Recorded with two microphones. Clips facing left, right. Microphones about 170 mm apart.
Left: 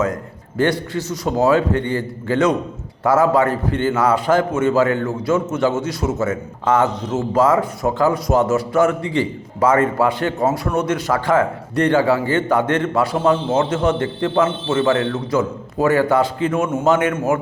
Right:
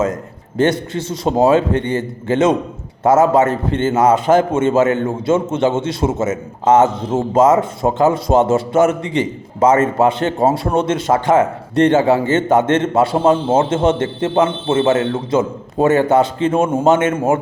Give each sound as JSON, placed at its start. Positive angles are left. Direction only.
{"t": 0.0, "sound": "a man's voice", "side_deg": -20}